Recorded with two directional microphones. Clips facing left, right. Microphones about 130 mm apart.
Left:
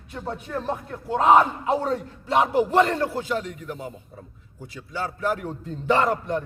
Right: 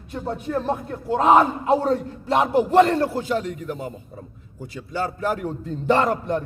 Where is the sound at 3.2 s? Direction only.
45° right (ahead or behind).